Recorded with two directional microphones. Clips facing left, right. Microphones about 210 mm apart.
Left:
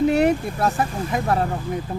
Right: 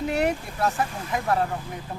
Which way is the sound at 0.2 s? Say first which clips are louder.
Left 6 dB; 30° left (ahead or behind).